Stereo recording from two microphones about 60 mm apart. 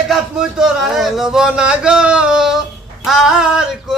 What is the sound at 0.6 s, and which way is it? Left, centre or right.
Speech, centre.